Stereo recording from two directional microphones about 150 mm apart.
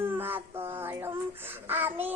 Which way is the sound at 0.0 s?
15° right (ahead or behind).